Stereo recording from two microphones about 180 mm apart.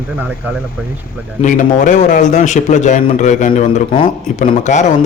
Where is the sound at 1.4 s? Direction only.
45° left (ahead or behind).